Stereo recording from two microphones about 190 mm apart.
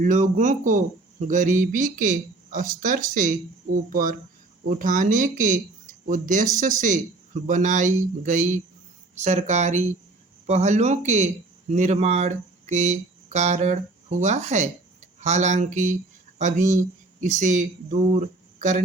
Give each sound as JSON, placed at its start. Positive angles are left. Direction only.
{"t": 0.0, "sound": "speech", "side_deg": -40}